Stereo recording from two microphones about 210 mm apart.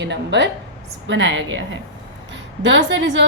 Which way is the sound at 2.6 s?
60° right (ahead or behind).